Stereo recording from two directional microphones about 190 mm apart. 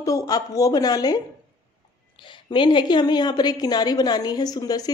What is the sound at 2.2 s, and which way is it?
Speech, 25° left (ahead or behind).